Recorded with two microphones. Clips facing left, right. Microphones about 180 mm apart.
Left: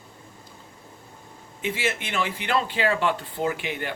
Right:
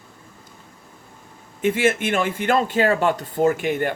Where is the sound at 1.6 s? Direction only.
50° right (ahead or behind).